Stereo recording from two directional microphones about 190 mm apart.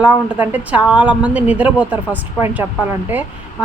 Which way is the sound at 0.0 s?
5° right (ahead or behind).